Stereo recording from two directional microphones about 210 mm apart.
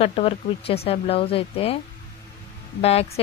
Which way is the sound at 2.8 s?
30° left (ahead or behind).